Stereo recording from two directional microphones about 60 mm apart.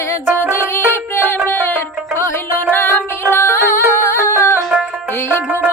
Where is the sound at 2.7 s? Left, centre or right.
Left.